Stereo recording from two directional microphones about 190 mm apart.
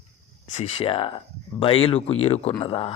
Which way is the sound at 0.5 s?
30° left (ahead or behind).